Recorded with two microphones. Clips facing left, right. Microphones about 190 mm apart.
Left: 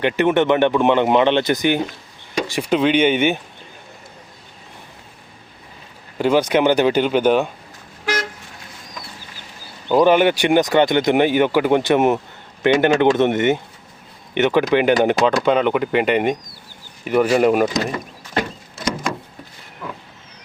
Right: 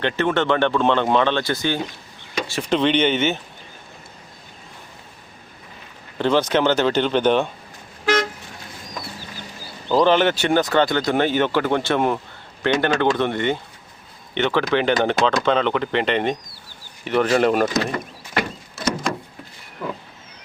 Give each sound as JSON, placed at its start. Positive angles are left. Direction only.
{"t": 0.0, "sound": "speech", "side_deg": 15}
{"t": 6.1, "sound": "speech", "side_deg": 10}
{"t": 9.9, "sound": "speech", "side_deg": 10}